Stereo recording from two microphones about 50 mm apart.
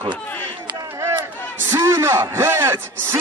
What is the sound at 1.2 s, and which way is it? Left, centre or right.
Crowd, right.